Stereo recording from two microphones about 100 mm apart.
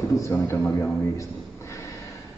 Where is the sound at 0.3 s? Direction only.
25° left (ahead or behind).